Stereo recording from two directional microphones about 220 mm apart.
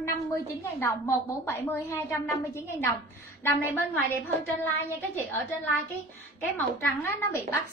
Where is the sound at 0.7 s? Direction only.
10° left (ahead or behind).